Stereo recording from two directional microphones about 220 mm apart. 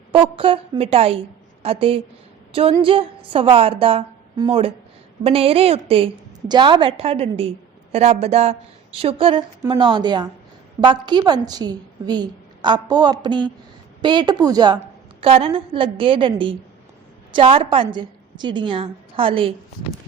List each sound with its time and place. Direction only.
0.1 s a woman's voice: 25° right (ahead or behind)